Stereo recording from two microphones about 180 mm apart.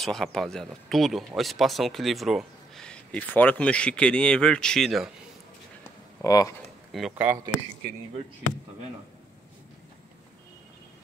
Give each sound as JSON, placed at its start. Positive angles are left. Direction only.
{"t": 0.0, "sound": "speech", "side_deg": 0}
{"t": 6.2, "sound": "speech", "side_deg": 20}
{"t": 6.9, "sound": "speech", "side_deg": 0}